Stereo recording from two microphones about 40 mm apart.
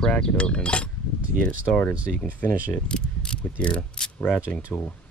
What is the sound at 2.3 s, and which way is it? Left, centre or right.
Speech, left.